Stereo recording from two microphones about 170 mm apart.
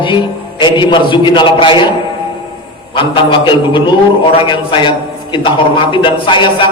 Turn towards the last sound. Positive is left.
turn(degrees=30)  # may be behind; listen again after turning